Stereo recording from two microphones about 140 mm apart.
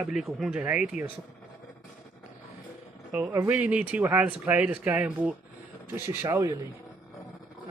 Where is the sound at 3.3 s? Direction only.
15° right (ahead or behind).